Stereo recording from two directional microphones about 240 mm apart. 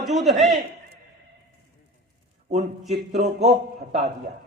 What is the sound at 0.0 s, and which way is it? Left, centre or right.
Speech, centre.